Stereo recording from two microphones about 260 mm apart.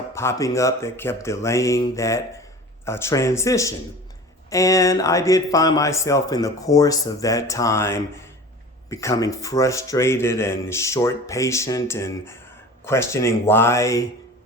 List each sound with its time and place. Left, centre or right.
0.1 s speech: centre